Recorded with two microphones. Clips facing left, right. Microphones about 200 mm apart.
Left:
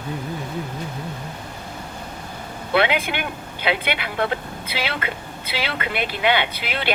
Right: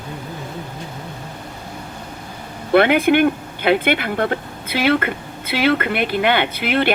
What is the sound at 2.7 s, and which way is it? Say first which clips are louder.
Speech: right 8 dB; 50° right (ahead or behind).